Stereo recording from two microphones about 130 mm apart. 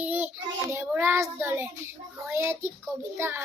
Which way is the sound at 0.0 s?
15° right (ahead or behind).